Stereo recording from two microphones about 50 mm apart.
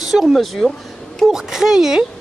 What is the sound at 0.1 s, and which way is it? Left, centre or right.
Speech, centre.